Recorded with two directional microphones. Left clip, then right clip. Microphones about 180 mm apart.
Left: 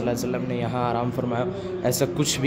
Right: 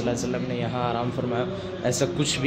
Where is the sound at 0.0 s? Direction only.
15° left (ahead or behind).